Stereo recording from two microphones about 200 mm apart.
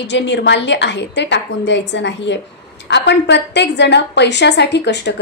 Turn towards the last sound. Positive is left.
turn(degrees=60)  # may be behind; listen again after turning